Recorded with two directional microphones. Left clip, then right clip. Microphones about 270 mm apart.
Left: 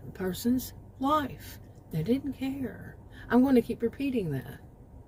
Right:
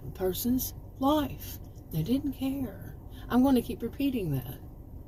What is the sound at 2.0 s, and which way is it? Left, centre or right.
Speech, left.